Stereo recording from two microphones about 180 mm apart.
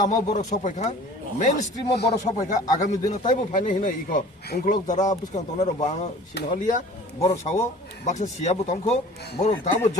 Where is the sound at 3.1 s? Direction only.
45° left (ahead or behind).